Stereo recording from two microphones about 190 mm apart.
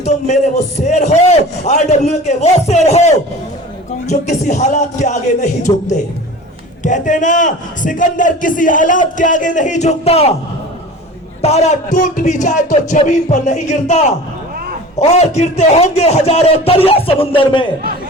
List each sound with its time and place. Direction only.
0.0 s a man's voice: 35° left (ahead or behind)
11.4 s a man's voice: 35° left (ahead or behind)